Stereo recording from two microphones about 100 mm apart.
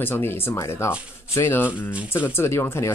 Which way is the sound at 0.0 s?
20° left (ahead or behind).